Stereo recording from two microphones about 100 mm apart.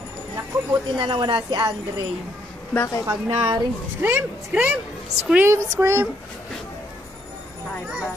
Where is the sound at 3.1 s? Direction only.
30° right (ahead or behind).